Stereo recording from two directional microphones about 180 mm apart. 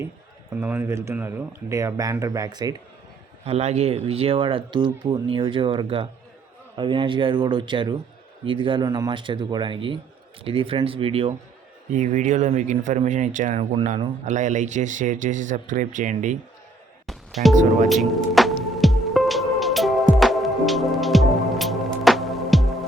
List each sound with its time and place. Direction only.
0.5 s speech: 10° right (ahead or behind)
3.4 s speech: 35° right (ahead or behind)
17.1 s music: centre (ahead or behind)